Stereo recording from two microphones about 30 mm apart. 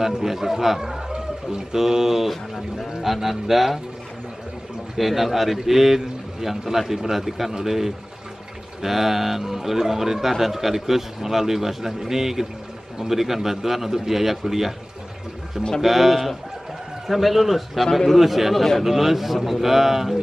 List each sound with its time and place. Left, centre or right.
0.0 s a man's voice: centre
1.1 s a sound: right
1.8 s a man's voice: centre
4.9 s a man's voice: centre
15.8 s a man's voice: centre